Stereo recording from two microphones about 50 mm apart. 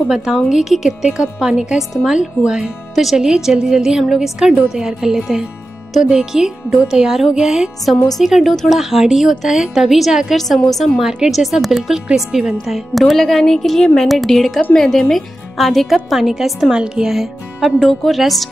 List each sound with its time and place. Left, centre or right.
0.1 s a woman's voice: centre
2.9 s a woman's voice: centre
11.0 s a woman's voice: centre
16.7 s a woman's voice: centre